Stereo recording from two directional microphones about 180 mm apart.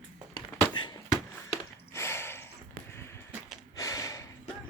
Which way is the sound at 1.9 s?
15° left (ahead or behind).